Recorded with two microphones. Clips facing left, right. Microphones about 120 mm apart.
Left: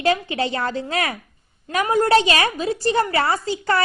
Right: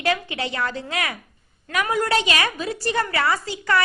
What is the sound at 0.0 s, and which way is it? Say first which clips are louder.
A woman's voice: left 4 dB; 30° left (ahead or behind).